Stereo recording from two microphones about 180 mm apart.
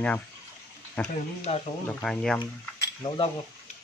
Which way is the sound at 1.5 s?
35° left (ahead or behind).